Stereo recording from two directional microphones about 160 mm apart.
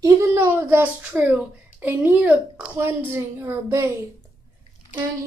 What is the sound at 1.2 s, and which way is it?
A woman's voice, 10° right (ahead or behind).